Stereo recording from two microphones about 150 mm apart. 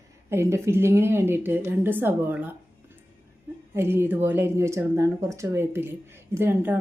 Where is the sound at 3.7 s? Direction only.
15° right (ahead or behind).